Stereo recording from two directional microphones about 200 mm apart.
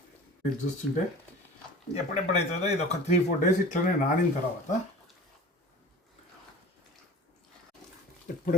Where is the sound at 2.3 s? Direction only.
35° left (ahead or behind).